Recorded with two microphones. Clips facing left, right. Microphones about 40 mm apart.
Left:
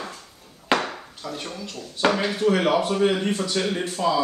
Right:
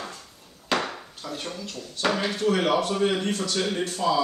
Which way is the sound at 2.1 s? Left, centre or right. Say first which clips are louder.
Left 3 dB; centre.